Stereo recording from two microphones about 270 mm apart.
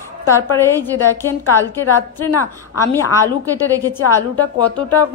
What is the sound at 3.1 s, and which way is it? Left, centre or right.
Speech, centre.